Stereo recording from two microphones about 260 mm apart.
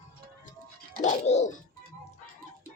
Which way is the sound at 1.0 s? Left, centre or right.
Left.